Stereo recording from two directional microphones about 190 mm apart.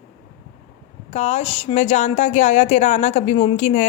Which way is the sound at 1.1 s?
35° left (ahead or behind).